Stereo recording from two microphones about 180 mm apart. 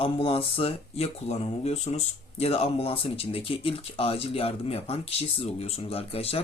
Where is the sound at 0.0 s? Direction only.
30° left (ahead or behind).